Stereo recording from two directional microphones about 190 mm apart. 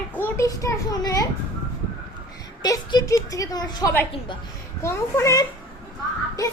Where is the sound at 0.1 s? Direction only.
10° left (ahead or behind).